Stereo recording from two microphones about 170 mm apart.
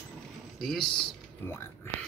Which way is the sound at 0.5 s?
Centre (ahead or behind).